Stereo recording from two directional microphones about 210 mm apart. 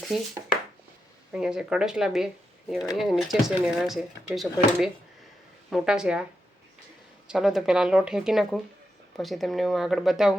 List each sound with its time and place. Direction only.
0.0 s a sound: centre (ahead or behind)
1.3 s speech: 5° right (ahead or behind)
7.3 s speech: centre (ahead or behind)